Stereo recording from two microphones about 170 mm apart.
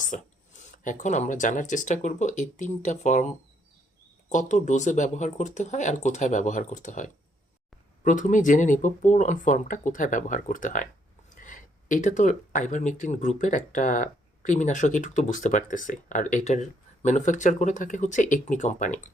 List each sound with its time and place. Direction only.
0.0 s speech: 50° left (ahead or behind)
4.3 s speech: 45° left (ahead or behind)